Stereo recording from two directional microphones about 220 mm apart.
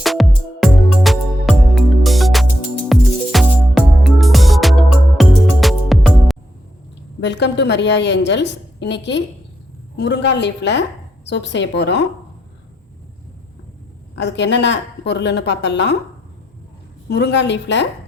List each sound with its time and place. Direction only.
0.0 s music: centre (ahead or behind)
7.2 s a woman's voice: 50° left (ahead or behind)
14.2 s a woman's voice: 55° left (ahead or behind)
17.1 s a woman's voice: 50° left (ahead or behind)